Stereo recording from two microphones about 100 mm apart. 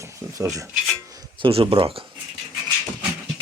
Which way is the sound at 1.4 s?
65° right (ahead or behind).